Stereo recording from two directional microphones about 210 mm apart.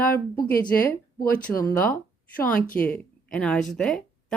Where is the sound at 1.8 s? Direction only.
5° left (ahead or behind).